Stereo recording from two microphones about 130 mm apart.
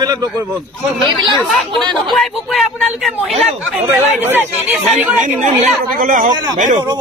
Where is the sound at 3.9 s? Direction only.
15° right (ahead or behind).